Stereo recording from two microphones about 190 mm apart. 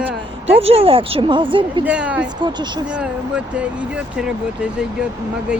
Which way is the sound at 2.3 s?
25° right (ahead or behind).